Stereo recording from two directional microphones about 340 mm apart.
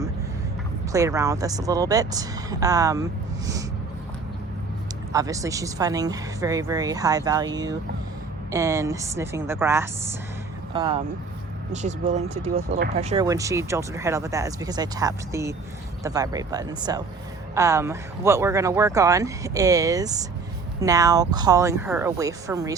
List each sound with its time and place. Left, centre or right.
0.9 s speech: centre
5.1 s speech: centre